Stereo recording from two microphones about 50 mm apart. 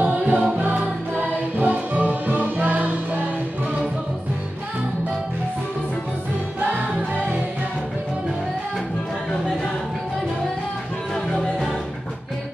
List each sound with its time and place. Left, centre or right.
0.0 s music: right
6.6 s music: right